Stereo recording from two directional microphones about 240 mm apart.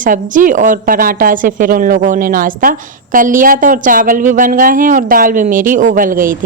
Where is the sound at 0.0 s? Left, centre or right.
Right.